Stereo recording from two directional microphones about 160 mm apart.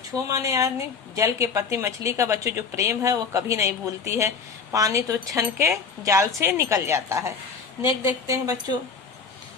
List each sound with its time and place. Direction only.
0.1 s a woman's voice: 20° right (ahead or behind)